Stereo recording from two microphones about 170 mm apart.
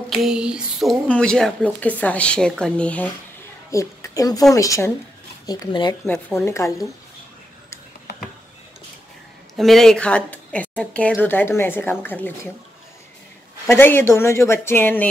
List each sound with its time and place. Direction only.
0.1 s speech: centre (ahead or behind)
3.7 s a woman's voice: 20° left (ahead or behind)
6.0 s speech: 10° left (ahead or behind)
9.6 s speech: centre (ahead or behind)
13.7 s speech: 15° left (ahead or behind)